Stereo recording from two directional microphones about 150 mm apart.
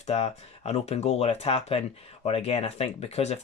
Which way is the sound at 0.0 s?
45° left (ahead or behind).